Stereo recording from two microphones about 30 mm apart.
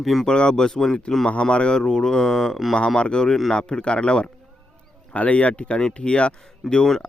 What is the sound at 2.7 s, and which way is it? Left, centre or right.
Speech, left.